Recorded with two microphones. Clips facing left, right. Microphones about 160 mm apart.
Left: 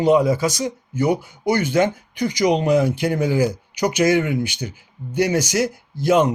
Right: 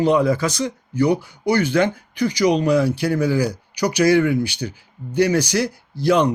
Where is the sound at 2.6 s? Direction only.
20° left (ahead or behind).